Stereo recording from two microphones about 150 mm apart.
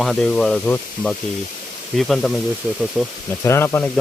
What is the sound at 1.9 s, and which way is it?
Speech, centre (ahead or behind).